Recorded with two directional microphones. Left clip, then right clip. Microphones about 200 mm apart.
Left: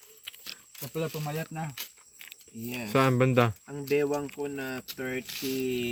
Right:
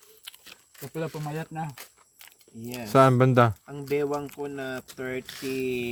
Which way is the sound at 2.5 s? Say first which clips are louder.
Right 3 dB; 55° right (ahead or behind).